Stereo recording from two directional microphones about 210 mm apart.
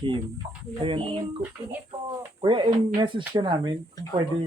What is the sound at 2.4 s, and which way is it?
Speech, 20° right (ahead or behind).